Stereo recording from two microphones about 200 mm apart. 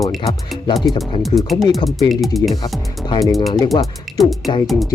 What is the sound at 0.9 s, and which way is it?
Speech, centre (ahead or behind).